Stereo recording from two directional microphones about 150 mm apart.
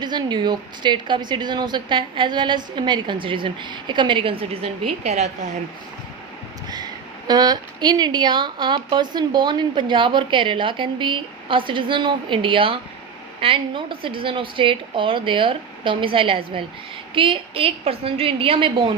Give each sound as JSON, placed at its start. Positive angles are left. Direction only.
{"t": 0.0, "sound": "a woman's voice", "side_deg": -30}
{"t": 6.7, "sound": "a woman's voice", "side_deg": -25}